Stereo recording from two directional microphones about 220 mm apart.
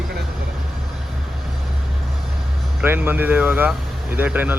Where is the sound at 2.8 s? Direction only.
10° right (ahead or behind).